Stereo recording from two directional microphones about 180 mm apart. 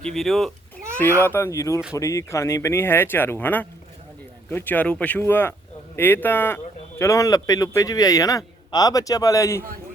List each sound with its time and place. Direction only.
0.0 s speech: centre (ahead or behind)
0.9 s a sound: 15° right (ahead or behind)
1.2 s a man's voice: 15° left (ahead or behind)